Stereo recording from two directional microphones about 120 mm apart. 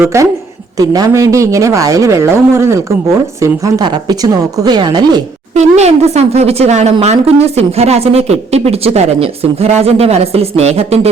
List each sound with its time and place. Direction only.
0.0 s a man's voice: 25° right (ahead or behind)
5.5 s a woman's voice: 65° right (ahead or behind)